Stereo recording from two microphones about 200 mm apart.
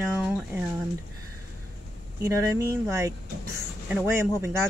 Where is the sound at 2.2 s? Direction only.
15° right (ahead or behind).